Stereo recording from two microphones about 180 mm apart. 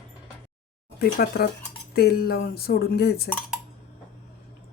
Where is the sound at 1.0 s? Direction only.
60° left (ahead or behind).